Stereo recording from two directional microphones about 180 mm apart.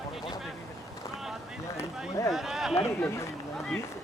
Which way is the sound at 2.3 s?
Centre (ahead or behind).